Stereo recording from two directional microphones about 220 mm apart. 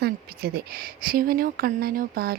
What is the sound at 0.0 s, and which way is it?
Speech, 45° right (ahead or behind).